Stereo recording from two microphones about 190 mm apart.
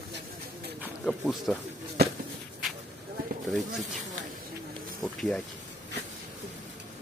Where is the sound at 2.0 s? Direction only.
55° right (ahead or behind).